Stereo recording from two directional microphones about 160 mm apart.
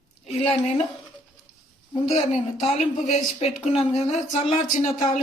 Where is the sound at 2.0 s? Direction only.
45° left (ahead or behind).